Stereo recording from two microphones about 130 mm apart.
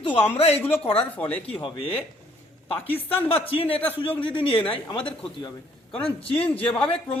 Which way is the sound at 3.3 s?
45° left (ahead or behind).